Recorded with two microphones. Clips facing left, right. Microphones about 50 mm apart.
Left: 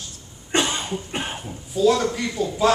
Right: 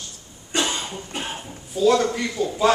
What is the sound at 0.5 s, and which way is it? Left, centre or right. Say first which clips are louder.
Cough: left 2 dB; left.